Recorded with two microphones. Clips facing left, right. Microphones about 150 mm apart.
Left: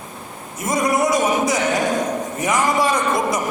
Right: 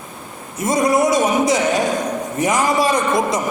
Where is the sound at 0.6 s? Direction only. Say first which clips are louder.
Right 3 dB; 25° right (ahead or behind).